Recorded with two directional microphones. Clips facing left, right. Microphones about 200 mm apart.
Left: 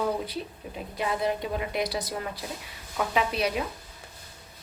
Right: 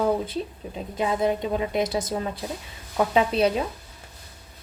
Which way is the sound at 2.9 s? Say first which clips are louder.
Right 6 dB; 30° right (ahead or behind).